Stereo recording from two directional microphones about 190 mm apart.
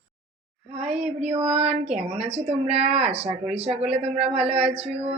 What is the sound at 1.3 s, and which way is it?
Speech, 30° right (ahead or behind).